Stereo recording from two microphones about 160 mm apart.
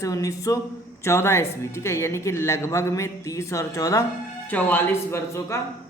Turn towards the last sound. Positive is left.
turn(degrees=15)  # may be behind; listen again after turning